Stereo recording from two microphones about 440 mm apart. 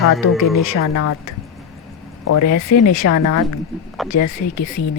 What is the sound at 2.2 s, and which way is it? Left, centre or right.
Speech, left.